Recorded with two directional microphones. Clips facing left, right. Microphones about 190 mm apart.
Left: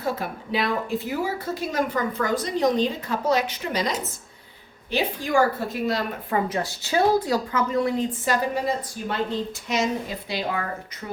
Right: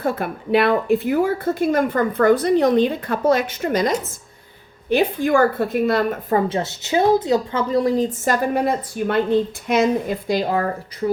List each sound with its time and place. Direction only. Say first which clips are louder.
0.0 s speech: right 5 dB; 60° right (ahead or behind)
6.3 s a woman's voice: right 4 dB; 25° right (ahead or behind)
7.7 s a woman's voice: right 7 dB; 35° right (ahead or behind)